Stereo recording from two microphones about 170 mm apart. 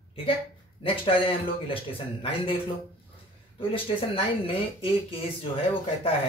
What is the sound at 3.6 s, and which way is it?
A man's voice, 30° left (ahead or behind).